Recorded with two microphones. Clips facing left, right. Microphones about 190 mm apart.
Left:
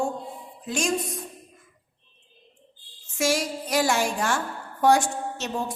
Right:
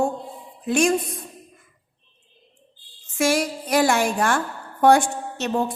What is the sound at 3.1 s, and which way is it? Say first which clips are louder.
A woman's voice: right 4 dB; 60° right (ahead or behind).